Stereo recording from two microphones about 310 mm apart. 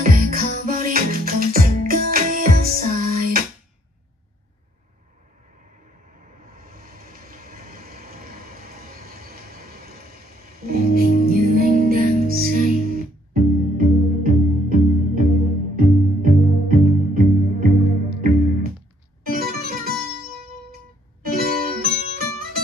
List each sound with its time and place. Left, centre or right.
0.0 s music: right
6.4 s vehicle: right
8.7 s train: right
10.6 s music: right
21.2 s music: right